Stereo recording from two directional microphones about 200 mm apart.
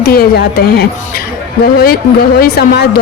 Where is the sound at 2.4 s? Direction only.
50° left (ahead or behind).